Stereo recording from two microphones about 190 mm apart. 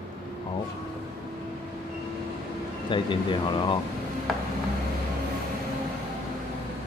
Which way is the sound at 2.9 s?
25° left (ahead or behind).